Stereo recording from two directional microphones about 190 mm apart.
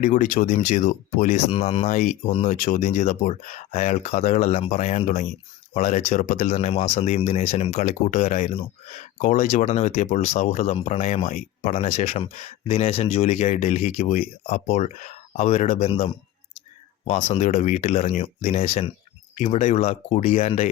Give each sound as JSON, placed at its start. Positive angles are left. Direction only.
{"t": 0.0, "sound": "speech", "side_deg": 40}